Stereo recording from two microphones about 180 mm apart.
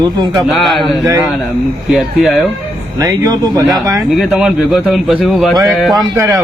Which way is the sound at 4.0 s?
5° right (ahead or behind).